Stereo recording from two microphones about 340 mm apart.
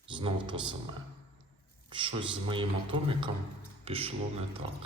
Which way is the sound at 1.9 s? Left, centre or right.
Centre.